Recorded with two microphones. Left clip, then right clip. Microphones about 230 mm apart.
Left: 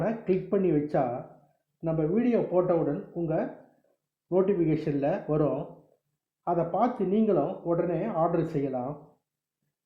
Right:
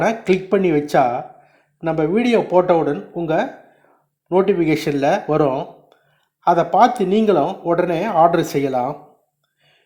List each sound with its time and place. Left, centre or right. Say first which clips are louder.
0.0 s speech: right 11 dB; centre